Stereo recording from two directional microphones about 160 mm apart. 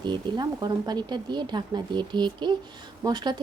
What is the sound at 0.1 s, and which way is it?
Speech, 25° right (ahead or behind).